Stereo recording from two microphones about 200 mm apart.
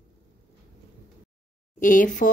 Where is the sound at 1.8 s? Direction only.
40° left (ahead or behind).